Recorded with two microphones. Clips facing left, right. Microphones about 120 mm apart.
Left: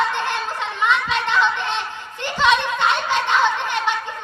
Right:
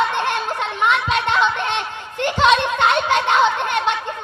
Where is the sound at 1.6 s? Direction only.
60° right (ahead or behind).